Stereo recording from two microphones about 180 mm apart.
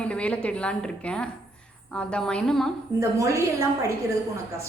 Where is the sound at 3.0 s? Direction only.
15° right (ahead or behind).